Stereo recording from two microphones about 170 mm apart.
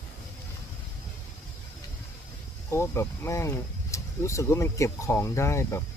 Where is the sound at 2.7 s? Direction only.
15° left (ahead or behind).